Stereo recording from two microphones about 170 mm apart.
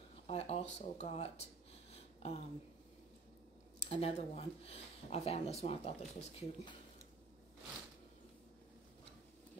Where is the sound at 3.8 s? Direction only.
35° left (ahead or behind).